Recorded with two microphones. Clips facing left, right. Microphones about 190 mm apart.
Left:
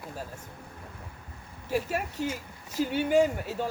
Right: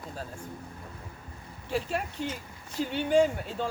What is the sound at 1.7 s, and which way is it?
Speech, 10° left (ahead or behind).